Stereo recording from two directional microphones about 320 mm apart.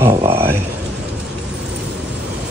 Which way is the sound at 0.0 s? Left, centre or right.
Centre.